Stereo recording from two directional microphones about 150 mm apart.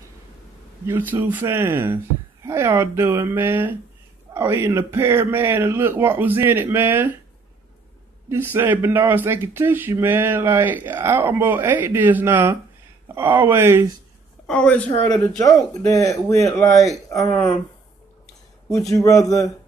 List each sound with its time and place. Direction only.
0.8 s speech: 15° right (ahead or behind)
8.3 s speech: 15° right (ahead or behind)
14.4 s a woman's voice: 10° left (ahead or behind)
15.3 s speech: 25° left (ahead or behind)
18.9 s speech: 20° left (ahead or behind)